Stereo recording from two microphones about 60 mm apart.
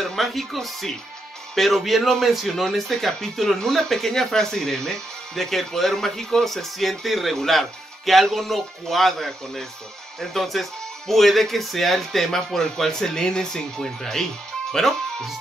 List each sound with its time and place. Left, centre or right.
0.0 s speech: centre